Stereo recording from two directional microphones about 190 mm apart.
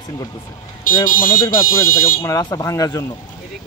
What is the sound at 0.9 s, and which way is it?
Buzzer, 45° left (ahead or behind).